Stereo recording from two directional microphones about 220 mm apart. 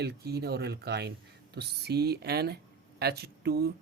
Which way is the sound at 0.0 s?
50° right (ahead or behind).